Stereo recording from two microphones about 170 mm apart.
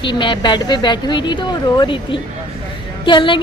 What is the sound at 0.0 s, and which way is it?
Speech, 30° left (ahead or behind).